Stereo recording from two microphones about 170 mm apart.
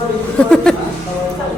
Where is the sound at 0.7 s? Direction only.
5° left (ahead or behind).